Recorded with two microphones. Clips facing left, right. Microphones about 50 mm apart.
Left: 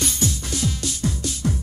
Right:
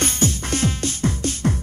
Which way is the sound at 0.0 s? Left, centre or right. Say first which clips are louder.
Right 3 dB; right.